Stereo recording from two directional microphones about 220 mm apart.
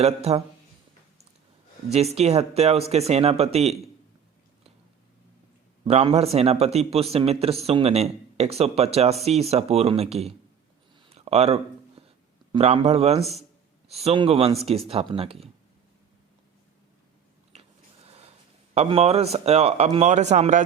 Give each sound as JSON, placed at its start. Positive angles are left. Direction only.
{"t": 0.0, "sound": "speech", "side_deg": -30}
{"t": 2.1, "sound": "speech", "side_deg": -30}
{"t": 5.8, "sound": "speech", "side_deg": -25}
{"t": 11.1, "sound": "a sound", "side_deg": -30}
{"t": 12.5, "sound": "speech", "side_deg": -25}
{"t": 17.5, "sound": "a sound", "side_deg": -25}
{"t": 18.7, "sound": "speech", "side_deg": -25}